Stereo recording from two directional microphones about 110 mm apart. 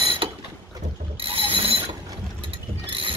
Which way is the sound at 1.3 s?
60° right (ahead or behind).